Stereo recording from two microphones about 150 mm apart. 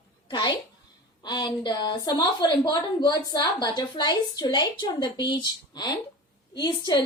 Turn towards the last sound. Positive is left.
turn(degrees=30)  # may be behind; listen again after turning